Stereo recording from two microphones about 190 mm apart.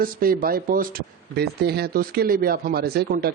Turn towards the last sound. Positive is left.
turn(degrees=-55)  # may be behind; listen again after turning